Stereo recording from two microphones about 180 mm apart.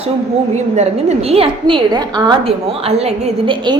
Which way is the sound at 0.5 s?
40° right (ahead or behind).